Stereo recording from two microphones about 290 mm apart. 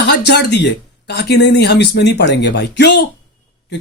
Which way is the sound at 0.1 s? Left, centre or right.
Left.